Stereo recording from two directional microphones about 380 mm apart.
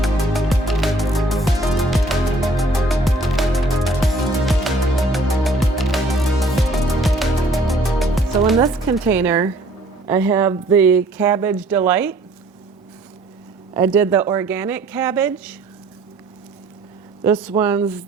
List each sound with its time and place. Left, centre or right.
0.0 s music: centre
10.1 s speech: centre
13.7 s speech: centre
17.2 s a woman's voice: centre